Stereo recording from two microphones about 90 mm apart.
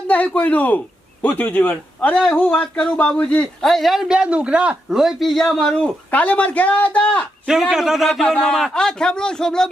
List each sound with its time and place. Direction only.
0.1 s a man's voice: 15° left (ahead or behind)
7.4 s a man's voice: 5° right (ahead or behind)